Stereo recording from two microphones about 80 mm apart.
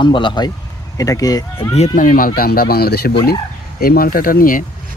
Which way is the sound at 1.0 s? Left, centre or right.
Left.